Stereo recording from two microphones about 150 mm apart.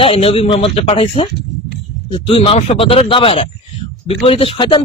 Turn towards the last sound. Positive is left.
turn(degrees=35)  # may be behind; listen again after turning